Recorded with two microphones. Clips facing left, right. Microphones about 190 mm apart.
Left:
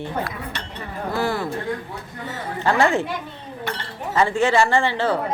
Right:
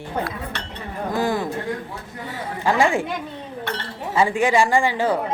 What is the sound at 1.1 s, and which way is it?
Speech, 15° right (ahead or behind).